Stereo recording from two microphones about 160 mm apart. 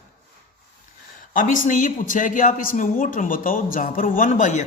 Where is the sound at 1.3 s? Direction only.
55° left (ahead or behind).